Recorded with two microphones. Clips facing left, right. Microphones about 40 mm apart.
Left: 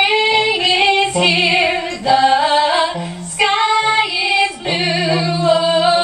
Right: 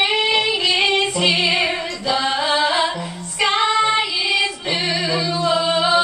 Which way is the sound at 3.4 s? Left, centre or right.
Centre.